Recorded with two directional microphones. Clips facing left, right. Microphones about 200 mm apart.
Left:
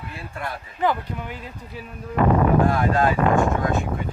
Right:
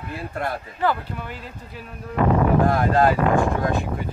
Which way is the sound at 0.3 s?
40° right (ahead or behind).